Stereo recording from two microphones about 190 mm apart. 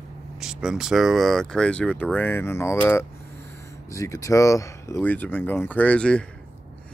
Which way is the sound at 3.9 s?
15° left (ahead or behind).